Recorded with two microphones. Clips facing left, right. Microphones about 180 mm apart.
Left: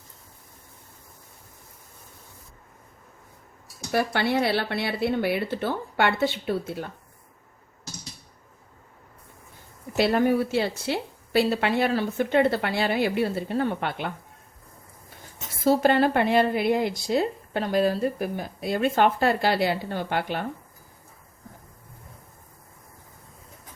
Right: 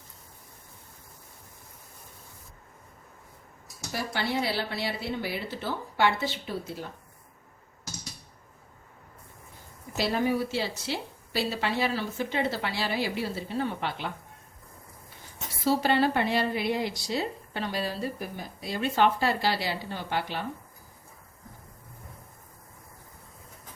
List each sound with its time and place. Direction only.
3.9 s a woman's voice: 60° left (ahead or behind)
10.0 s a woman's voice: 55° left (ahead or behind)
15.6 s a woman's voice: 50° left (ahead or behind)